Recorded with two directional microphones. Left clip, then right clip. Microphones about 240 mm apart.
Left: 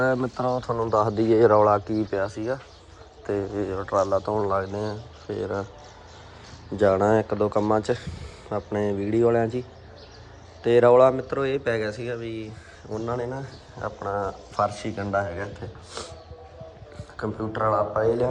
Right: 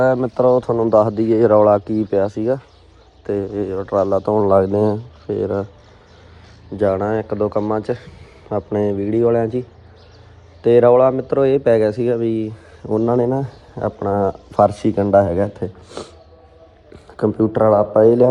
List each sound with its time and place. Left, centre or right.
0.3 s speech: centre
1.1 s speech: centre
1.5 s speech: centre
4.4 s speech: right
5.3 s speech: centre
6.7 s speech: centre
12.9 s speech: centre
14.7 s speech: centre
16.0 s a sound: centre
17.2 s speech: right
18.0 s speech: centre